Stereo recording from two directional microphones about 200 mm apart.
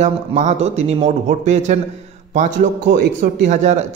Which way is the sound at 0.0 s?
35° right (ahead or behind).